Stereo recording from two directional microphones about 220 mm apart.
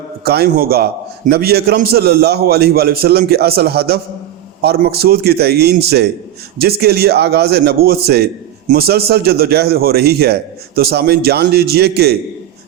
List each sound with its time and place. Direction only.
0.3 s a man's voice: 45° right (ahead or behind)